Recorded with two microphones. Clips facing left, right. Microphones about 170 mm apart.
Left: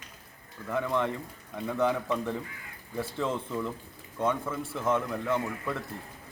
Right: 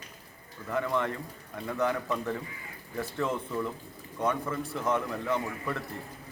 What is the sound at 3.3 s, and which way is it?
Speech, 20° left (ahead or behind).